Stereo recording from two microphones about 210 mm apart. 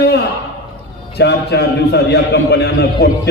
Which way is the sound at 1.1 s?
55° left (ahead or behind).